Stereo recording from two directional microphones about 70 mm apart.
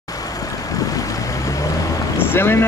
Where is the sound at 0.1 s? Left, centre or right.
Left.